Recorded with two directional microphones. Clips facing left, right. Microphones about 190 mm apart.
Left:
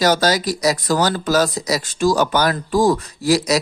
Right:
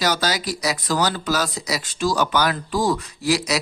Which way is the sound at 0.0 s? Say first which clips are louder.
Left 6 dB; 45° left (ahead or behind).